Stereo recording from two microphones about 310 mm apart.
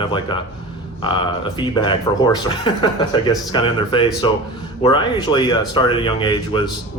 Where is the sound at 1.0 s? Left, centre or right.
Centre.